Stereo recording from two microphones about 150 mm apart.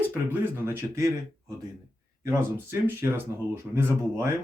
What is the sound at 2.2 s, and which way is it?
Speech, 15° right (ahead or behind).